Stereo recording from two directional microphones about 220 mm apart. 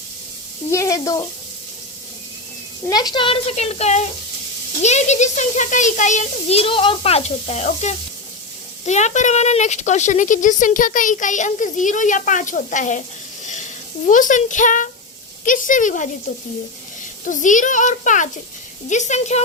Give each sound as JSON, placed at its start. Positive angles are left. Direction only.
{"t": 0.7, "sound": "speech", "side_deg": 15}
{"t": 2.9, "sound": "a woman's voice", "side_deg": 20}
{"t": 14.1, "sound": "a woman's voice", "side_deg": 35}
{"t": 17.2, "sound": "a woman's voice", "side_deg": 35}